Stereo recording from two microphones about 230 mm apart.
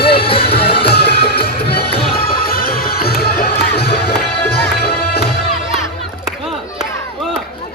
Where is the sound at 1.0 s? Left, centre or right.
Left.